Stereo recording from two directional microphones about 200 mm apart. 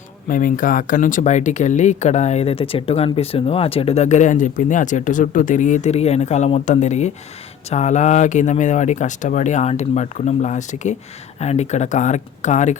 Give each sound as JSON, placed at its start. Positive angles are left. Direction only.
{"t": 0.3, "sound": "speech", "side_deg": 40}